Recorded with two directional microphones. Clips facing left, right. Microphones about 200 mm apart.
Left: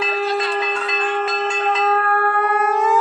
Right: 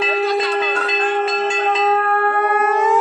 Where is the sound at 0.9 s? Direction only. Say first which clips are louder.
Right 3 dB; 35° right (ahead or behind).